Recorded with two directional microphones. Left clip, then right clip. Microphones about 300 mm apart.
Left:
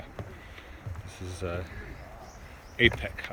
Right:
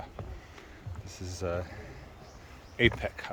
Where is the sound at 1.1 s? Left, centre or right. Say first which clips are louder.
Left 1 dB; right.